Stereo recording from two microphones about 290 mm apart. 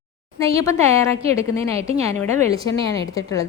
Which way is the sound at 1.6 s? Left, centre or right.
Right.